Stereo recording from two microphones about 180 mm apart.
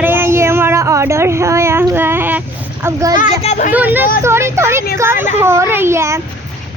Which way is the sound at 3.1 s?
40° left (ahead or behind).